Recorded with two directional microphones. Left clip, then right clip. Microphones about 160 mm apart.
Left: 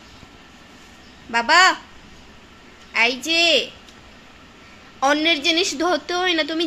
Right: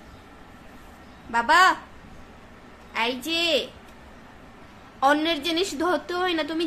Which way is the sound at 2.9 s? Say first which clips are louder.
Left 7 dB; 15° left (ahead or behind).